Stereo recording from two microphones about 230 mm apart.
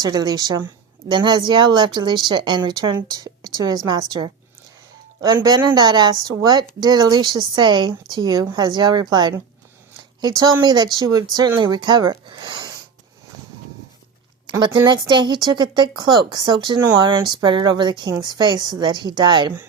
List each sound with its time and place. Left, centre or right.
0.0 s a woman's voice: centre
14.4 s speech: centre